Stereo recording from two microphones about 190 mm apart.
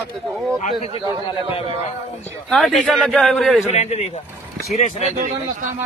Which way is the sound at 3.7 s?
35° left (ahead or behind).